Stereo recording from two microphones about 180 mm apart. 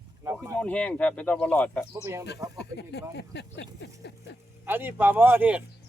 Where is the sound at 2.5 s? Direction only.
70° left (ahead or behind).